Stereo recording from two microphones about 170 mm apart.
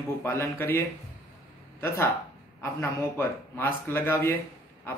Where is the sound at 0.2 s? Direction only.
15° left (ahead or behind).